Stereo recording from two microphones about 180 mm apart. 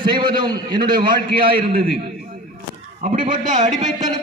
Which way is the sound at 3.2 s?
25° right (ahead or behind).